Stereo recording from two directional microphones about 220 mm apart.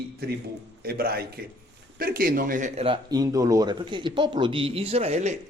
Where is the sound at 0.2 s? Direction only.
45° right (ahead or behind); by 5.4 s 30° right (ahead or behind).